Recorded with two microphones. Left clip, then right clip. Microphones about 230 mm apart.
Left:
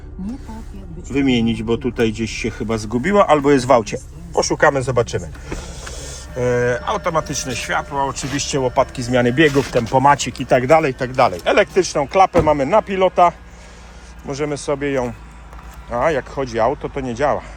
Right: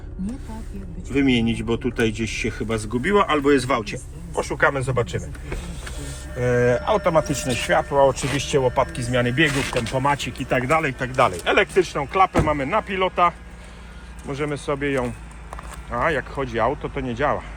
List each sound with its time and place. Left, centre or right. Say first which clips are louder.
1.1 s speech: left 2 dB; centre
3.5 s a man's voice: left 6 dB; left
6.4 s speech: left 2 dB; centre
8.4 s speech: left 3 dB; centre